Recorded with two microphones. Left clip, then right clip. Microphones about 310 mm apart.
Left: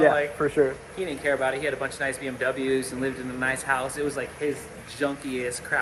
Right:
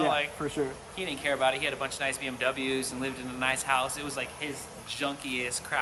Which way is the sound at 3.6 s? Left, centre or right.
Centre.